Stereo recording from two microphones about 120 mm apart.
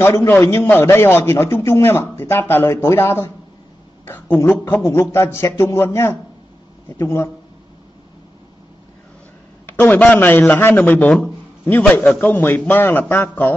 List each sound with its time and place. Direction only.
0.0 s a man's voice: 20° left (ahead or behind)
9.8 s a man's voice: 15° left (ahead or behind)